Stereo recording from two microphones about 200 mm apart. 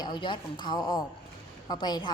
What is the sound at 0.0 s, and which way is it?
A woman's voice, 25° left (ahead or behind).